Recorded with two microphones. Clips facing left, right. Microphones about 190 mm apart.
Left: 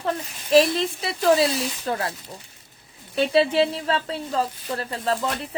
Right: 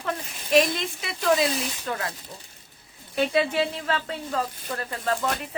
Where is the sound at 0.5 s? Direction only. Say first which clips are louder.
Left 4 dB; 30° left (ahead or behind).